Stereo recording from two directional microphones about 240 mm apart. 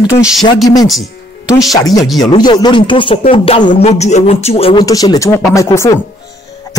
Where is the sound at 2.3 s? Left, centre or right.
Centre.